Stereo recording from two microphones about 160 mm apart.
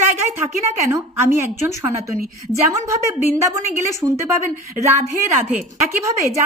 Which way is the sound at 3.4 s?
20° right (ahead or behind).